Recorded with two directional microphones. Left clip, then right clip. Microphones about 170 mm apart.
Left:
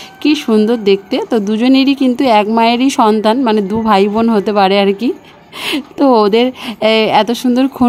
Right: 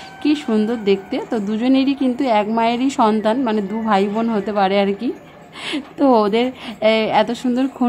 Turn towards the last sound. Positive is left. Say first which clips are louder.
# left 7 dB
turn(degrees=45)  # may be behind; listen again after turning